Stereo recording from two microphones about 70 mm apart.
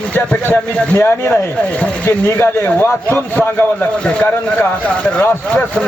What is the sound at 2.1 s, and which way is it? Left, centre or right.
A man's voice, left.